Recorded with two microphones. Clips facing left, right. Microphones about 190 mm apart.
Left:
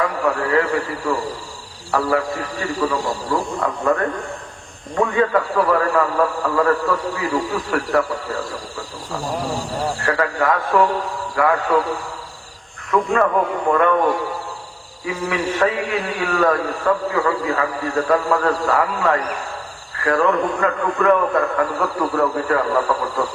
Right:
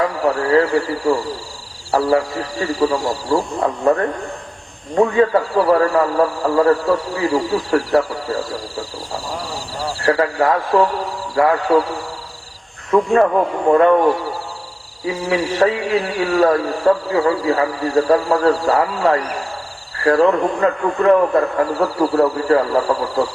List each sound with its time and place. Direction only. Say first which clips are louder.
0.0 s a man's voice: right 2 dB; 30° right (ahead or behind)
4.9 s speech: right 4 dB; 30° right (ahead or behind)
10.0 s a man's voice: right 6 dB; 30° right (ahead or behind)
12.9 s a man's voice: right 4 dB; 30° right (ahead or behind)
15.0 s a man's voice: right 3 dB; 30° right (ahead or behind)